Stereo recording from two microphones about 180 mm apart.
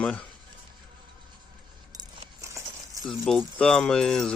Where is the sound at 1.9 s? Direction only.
20° right (ahead or behind).